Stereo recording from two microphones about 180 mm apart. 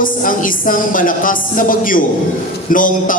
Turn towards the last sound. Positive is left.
turn(degrees=50)  # may be behind; listen again after turning